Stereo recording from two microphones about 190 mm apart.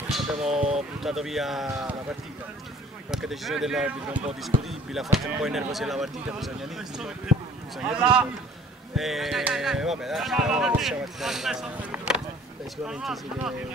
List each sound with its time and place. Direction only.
0.1 s speech: 5° right (ahead or behind)
0.6 s speech: 35° right (ahead or behind)
1.0 s speech: centre (ahead or behind)
3.1 s speech: centre (ahead or behind)